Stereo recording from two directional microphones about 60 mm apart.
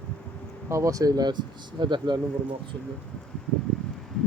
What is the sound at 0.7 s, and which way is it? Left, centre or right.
Speech, right.